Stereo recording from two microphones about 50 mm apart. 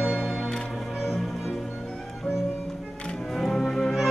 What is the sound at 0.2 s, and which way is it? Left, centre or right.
Music, centre.